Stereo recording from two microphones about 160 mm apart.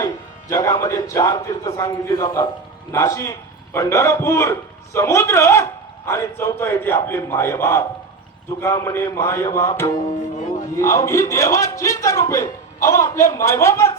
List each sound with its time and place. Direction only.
0.0 s a man's voice: 20° left (ahead or behind)